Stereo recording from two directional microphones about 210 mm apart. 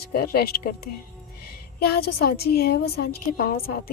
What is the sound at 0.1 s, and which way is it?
A woman's voice, 50° left (ahead or behind).